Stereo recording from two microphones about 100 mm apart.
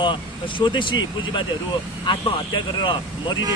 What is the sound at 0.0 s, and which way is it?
Speech, 55° left (ahead or behind).